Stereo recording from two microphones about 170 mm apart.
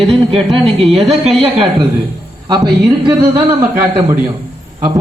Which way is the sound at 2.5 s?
25° right (ahead or behind).